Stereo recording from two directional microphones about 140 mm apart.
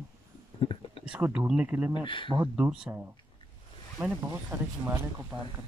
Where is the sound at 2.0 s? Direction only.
35° left (ahead or behind).